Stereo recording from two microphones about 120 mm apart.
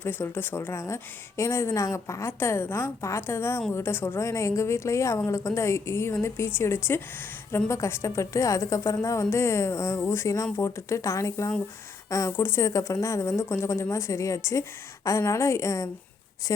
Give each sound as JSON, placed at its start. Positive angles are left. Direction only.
{"t": 0.0, "sound": "a woman's voice", "side_deg": 15}